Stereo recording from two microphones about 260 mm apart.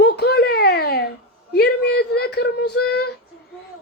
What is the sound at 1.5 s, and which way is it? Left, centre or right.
Child singing, left.